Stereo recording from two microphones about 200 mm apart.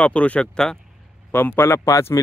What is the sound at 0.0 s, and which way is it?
Speech, 5° left (ahead or behind).